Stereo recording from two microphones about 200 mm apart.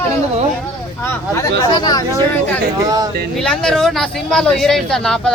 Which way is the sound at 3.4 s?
5° left (ahead or behind).